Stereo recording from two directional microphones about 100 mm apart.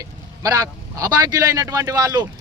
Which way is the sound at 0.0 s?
35° right (ahead or behind).